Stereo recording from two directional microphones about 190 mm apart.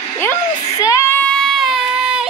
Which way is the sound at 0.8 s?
15° left (ahead or behind).